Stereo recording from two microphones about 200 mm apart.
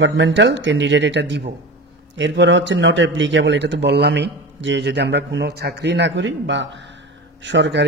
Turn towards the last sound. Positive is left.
turn(degrees=-60)  # may be behind; listen again after turning